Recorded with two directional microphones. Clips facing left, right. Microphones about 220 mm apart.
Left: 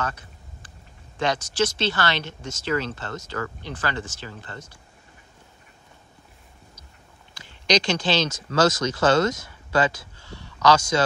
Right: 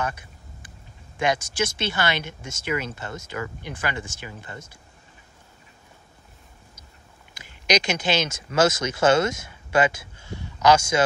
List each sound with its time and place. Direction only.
0.0 s speech: 15° right (ahead or behind)
7.4 s a sound: 10° right (ahead or behind)
8.3 s speech: 25° right (ahead or behind)